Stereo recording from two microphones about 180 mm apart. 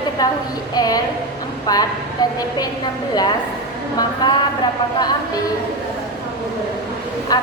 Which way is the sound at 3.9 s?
25° left (ahead or behind).